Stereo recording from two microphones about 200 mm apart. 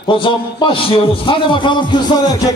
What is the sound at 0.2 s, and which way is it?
A man's voice, 25° left (ahead or behind).